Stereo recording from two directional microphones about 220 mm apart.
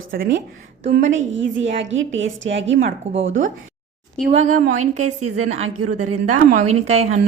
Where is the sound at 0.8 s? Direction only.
60° right (ahead or behind).